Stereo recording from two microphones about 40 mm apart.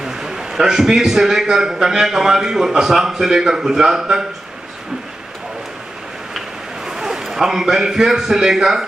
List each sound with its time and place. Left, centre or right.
0.0 s a man's voice: centre
6.9 s a man's voice: centre